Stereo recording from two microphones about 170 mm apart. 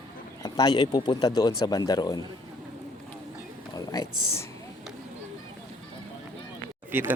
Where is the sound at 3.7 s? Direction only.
20° left (ahead or behind).